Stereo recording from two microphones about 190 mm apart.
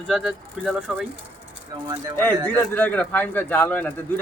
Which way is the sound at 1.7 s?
20° right (ahead or behind).